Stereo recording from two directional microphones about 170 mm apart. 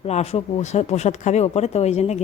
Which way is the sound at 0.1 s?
40° left (ahead or behind).